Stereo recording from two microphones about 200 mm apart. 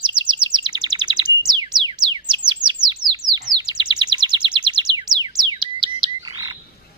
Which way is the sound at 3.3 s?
20° right (ahead or behind).